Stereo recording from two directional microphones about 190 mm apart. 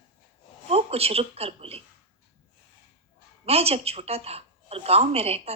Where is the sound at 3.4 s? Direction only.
30° right (ahead or behind).